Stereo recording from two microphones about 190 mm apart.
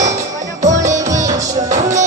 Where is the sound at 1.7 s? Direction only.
40° right (ahead or behind).